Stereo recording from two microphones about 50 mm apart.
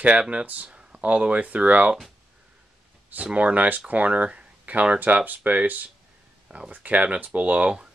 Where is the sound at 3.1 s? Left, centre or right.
Right.